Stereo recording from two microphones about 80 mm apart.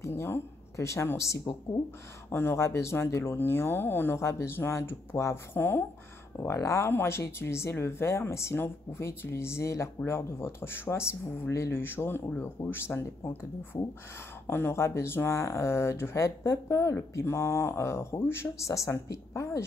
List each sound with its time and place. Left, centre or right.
0.0 s speech: left
2.2 s speech: left
6.4 s speech: left
14.5 s speech: left